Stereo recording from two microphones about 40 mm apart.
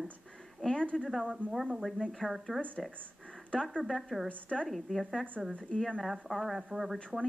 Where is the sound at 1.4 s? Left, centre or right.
Right.